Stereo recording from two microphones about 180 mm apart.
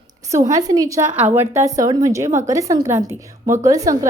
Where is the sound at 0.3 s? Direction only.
20° right (ahead or behind).